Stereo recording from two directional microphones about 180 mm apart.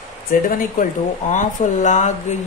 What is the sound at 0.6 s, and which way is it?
Speech, 45° left (ahead or behind).